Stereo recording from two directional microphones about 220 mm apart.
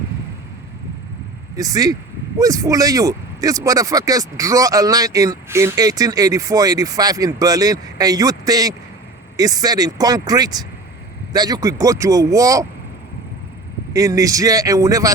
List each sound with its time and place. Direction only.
1.5 s speech: 15° right (ahead or behind)
13.9 s speech: 15° right (ahead or behind)